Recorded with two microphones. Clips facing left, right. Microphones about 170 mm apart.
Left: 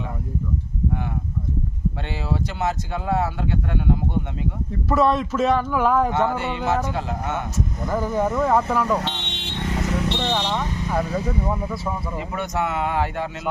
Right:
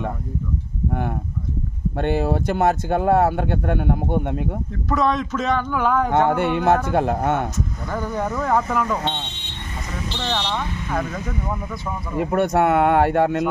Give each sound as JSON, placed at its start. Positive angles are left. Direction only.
{"t": 2.0, "sound": "speech", "side_deg": -50}
{"t": 4.8, "sound": "speech", "side_deg": 5}
{"t": 6.1, "sound": "a man's voice", "side_deg": -55}
{"t": 7.9, "sound": "speech", "side_deg": 5}
{"t": 9.2, "sound": "vehicle", "side_deg": 85}
{"t": 10.1, "sound": "speech", "side_deg": 10}
{"t": 12.2, "sound": "a man's voice", "side_deg": -55}